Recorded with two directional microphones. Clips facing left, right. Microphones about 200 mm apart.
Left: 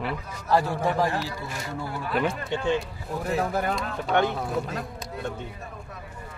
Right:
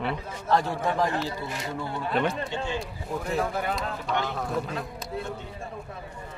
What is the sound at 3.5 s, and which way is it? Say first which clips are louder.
Speech: left 3 dB; 45° left (ahead or behind).